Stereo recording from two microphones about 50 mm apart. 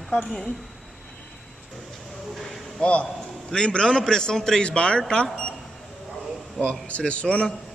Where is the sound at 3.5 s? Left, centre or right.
Centre.